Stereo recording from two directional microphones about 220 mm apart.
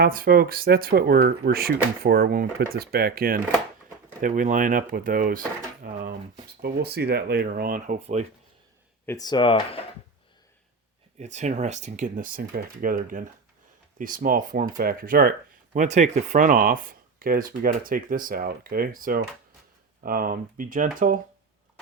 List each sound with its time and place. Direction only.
0.0 s speech: 40° right (ahead or behind)
5.8 s a sound: 40° right (ahead or behind)
6.6 s speech: 45° right (ahead or behind); by 8.3 s 30° right (ahead or behind)
9.0 s speech: 15° left (ahead or behind)
11.2 s speech: 30° right (ahead or behind)